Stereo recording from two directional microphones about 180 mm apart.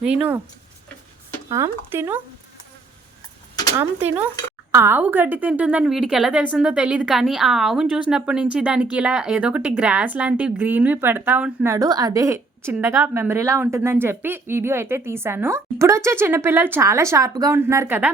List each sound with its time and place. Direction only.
0.0 s a woman's voice: 5° right (ahead or behind)
1.5 s speech: 15° right (ahead or behind)
3.5 s a sound: 20° left (ahead or behind)
4.7 s a woman's voice: 10° right (ahead or behind)